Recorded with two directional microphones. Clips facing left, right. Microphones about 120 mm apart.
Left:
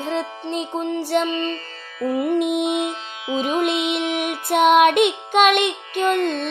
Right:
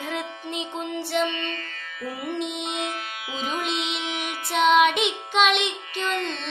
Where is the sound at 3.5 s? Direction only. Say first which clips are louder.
Left 8 dB; 60° left (ahead or behind).